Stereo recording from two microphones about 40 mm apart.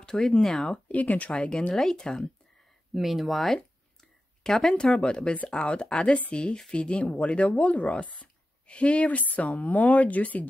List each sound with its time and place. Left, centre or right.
0.0 s speech: centre
0.8 s speech: left
1.7 s speech: centre
2.9 s speech: centre
4.4 s speech: centre
5.0 s speech: left
9.8 s speech: left